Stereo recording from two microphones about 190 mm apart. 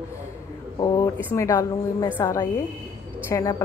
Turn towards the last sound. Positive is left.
turn(degrees=15)  # may be behind; listen again after turning